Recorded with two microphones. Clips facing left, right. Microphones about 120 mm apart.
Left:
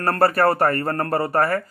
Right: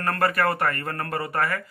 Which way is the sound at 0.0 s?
35° left (ahead or behind).